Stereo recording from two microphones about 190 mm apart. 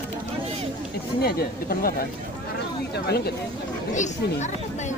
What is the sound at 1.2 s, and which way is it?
Speech, 50° left (ahead or behind).